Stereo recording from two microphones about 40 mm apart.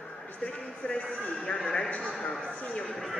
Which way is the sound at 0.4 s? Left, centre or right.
Left.